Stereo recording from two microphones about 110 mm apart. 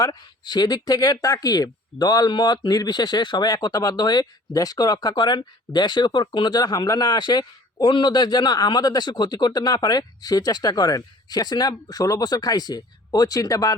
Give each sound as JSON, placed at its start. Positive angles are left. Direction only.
{"t": 0.0, "sound": "speech", "side_deg": 35}